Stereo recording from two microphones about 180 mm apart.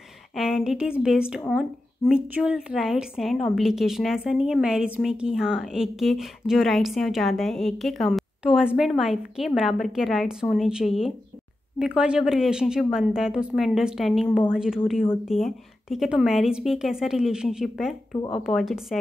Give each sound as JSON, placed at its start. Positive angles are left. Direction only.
{"t": 0.4, "sound": "a woman's voice", "side_deg": 0}
{"t": 18.1, "sound": "speech", "side_deg": 25}
{"t": 18.4, "sound": "a woman's voice", "side_deg": 0}